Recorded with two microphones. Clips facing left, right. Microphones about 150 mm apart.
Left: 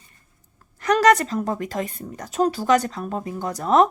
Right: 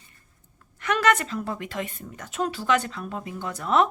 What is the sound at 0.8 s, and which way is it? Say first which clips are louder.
A woman's voice: left 6 dB; 40° left (ahead or behind).